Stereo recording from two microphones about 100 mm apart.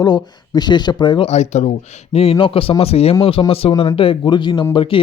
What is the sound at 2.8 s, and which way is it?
Speech, 85° left.